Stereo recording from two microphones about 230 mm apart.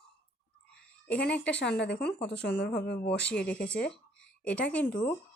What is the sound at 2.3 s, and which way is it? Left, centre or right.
Speech, left.